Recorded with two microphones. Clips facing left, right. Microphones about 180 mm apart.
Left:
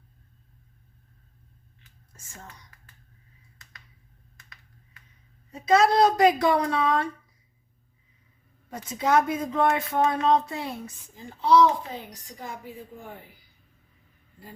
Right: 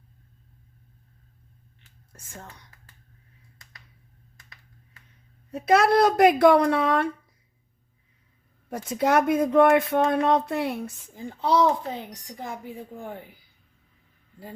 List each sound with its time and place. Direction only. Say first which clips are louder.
5.5 s speech: right 1 dB; 60° right (ahead or behind)
8.7 s speech: right 1 dB; 60° right (ahead or behind)